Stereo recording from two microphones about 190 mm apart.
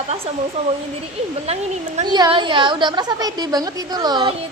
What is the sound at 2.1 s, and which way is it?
A woman's voice, 20° right (ahead or behind).